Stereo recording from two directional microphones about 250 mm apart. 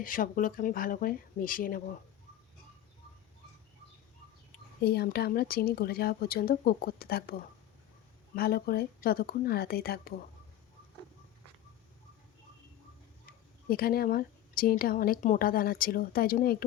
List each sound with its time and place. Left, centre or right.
0.0 s speech: left
4.8 s speech: left
13.7 s speech: left